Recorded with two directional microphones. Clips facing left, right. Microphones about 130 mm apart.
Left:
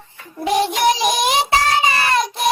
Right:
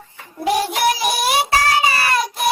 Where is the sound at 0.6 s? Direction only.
20° left (ahead or behind).